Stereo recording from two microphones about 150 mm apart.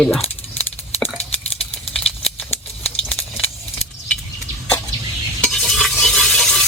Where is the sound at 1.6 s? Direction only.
40° left (ahead or behind).